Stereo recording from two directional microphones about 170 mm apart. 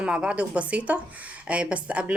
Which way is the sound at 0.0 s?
5° right (ahead or behind).